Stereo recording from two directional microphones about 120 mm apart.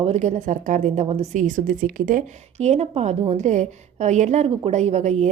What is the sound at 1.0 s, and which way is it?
A woman's voice, 65° right (ahead or behind).